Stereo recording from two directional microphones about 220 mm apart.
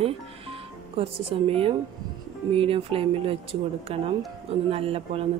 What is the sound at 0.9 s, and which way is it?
Speech, 25° right (ahead or behind).